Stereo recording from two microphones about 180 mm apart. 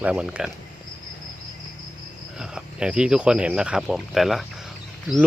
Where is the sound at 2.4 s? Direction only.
5° right (ahead or behind).